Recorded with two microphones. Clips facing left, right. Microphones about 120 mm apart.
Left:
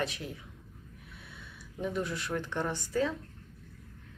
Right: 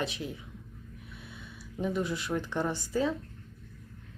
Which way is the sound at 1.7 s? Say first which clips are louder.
Right 2 dB; 5° right (ahead or behind).